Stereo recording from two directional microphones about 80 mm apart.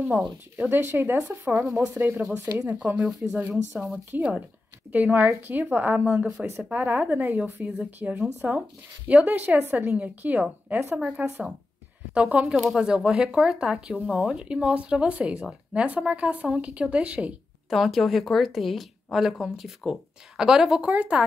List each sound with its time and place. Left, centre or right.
0.6 s speech: right
3.1 s speech: centre; by 6.1 s right
6.1 s speech: centre
11.0 s speech: centre
12.5 s speech: centre
17.6 s a woman's voice: centre
20.8 s speech: centre